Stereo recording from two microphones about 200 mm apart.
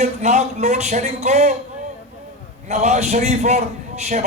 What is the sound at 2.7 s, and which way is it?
A man's voice, 35° right (ahead or behind).